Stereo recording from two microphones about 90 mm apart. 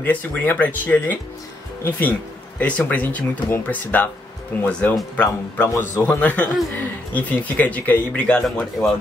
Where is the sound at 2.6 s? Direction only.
15° left (ahead or behind).